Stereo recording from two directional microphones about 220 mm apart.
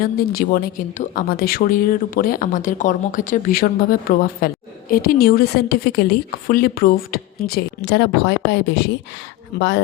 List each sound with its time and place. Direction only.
0.0 s a woman's voice: 40° left (ahead or behind)